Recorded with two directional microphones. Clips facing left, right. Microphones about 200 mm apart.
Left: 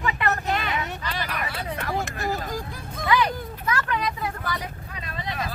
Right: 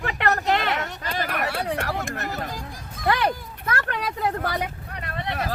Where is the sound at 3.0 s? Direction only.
55° right (ahead or behind).